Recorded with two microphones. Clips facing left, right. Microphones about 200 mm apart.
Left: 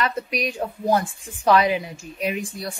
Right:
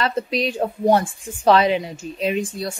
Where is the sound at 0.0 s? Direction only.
30° right (ahead or behind).